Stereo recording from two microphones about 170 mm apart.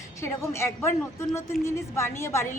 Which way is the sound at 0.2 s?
15° left (ahead or behind).